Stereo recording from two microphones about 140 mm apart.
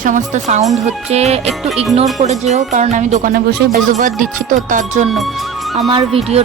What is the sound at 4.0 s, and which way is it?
Music, 70° right (ahead or behind).